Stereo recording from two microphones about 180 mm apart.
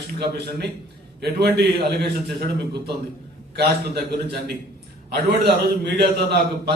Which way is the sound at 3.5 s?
65° right (ahead or behind).